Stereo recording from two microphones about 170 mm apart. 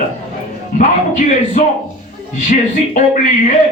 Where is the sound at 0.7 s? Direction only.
50° left (ahead or behind).